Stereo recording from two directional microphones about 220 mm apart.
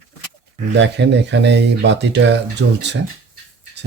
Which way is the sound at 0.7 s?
50° right (ahead or behind).